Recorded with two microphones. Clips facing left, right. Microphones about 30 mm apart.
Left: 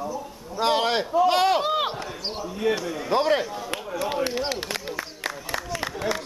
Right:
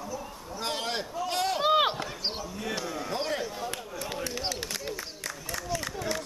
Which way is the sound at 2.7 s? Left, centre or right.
Centre.